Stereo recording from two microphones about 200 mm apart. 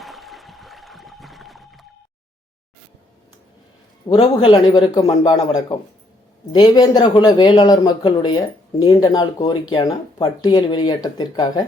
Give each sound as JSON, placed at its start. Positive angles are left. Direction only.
{"t": 0.0, "sound": "music", "side_deg": 0}
{"t": 4.1, "sound": "speech", "side_deg": 20}